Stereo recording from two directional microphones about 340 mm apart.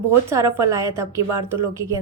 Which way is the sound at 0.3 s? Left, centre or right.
Centre.